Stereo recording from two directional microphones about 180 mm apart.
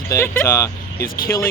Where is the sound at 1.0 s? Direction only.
55° left (ahead or behind).